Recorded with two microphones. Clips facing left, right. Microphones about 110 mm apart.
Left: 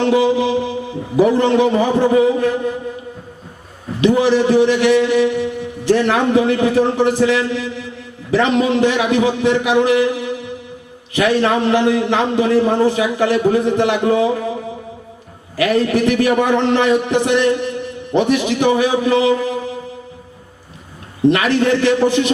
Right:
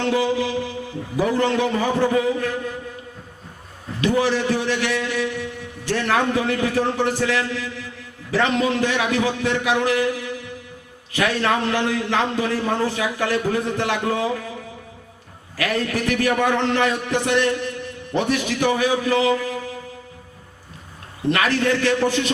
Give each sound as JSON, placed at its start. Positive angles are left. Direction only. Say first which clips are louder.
{"t": 0.0, "sound": "a man's voice", "louder": "left 6 dB", "side_deg": 20}
{"t": 4.0, "sound": "a man's voice", "louder": "left 7 dB", "side_deg": 20}
{"t": 21.2, "sound": "a man's voice", "louder": "left 6 dB", "side_deg": 20}